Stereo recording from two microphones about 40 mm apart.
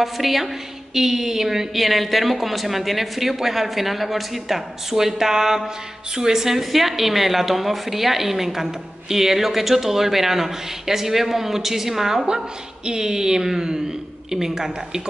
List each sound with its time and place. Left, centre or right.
0.0 s a woman's voice: centre